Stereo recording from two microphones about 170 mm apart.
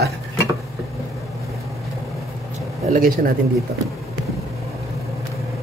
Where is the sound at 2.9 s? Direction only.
55° right (ahead or behind).